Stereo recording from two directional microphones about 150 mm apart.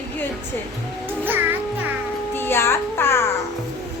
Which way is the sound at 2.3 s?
15° left (ahead or behind).